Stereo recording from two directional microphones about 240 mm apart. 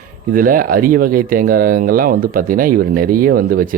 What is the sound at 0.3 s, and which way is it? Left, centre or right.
Speech, right.